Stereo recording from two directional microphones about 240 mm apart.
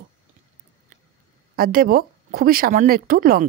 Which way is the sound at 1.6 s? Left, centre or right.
Right.